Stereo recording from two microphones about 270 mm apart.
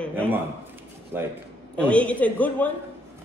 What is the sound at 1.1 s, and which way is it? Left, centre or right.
Speech, centre.